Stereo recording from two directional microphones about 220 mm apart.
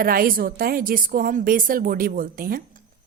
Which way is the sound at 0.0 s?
40° right (ahead or behind).